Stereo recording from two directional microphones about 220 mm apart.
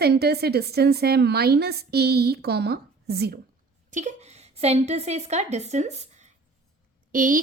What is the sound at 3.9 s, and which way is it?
A woman's voice, 35° right (ahead or behind).